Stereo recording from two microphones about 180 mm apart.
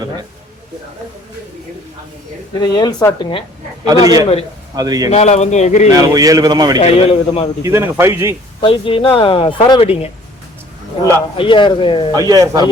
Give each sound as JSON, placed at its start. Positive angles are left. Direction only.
{"t": 2.6, "sound": "speech", "side_deg": 20}
{"t": 4.0, "sound": "speech", "side_deg": -20}
{"t": 5.1, "sound": "speech", "side_deg": 40}
{"t": 5.9, "sound": "speech", "side_deg": -20}
{"t": 6.7, "sound": "speech", "side_deg": 30}
{"t": 7.6, "sound": "speech", "side_deg": -15}
{"t": 8.6, "sound": "speech", "side_deg": 30}
{"t": 11.3, "sound": "speech", "side_deg": 25}
{"t": 12.1, "sound": "speech", "side_deg": -20}